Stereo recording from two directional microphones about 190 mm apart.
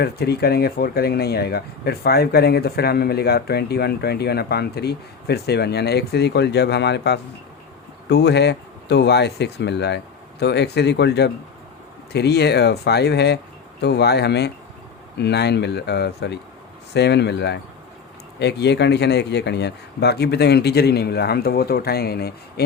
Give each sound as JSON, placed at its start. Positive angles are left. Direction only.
{"t": 0.0, "sound": "speech", "side_deg": 55}